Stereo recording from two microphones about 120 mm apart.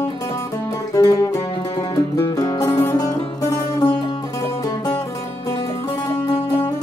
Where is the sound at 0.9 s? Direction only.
30° left (ahead or behind).